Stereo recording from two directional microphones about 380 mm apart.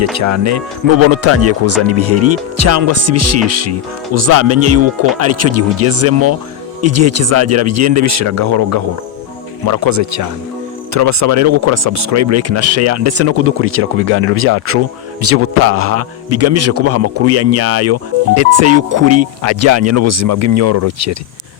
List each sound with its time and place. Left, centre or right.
0.0 s a man's voice: right